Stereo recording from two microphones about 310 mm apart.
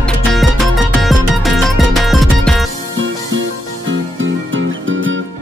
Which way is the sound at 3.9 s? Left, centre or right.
Right.